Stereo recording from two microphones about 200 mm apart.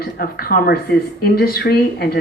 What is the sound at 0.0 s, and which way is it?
Speech, 50° left (ahead or behind).